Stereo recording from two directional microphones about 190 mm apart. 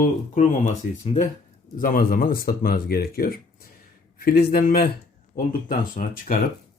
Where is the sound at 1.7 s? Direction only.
45° left (ahead or behind).